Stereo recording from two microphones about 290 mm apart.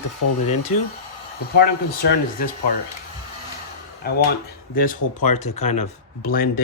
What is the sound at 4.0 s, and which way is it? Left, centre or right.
Speech, left.